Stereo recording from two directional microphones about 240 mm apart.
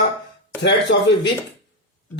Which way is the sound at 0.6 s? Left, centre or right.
Left.